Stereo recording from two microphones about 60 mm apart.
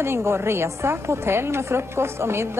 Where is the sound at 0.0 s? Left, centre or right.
Right.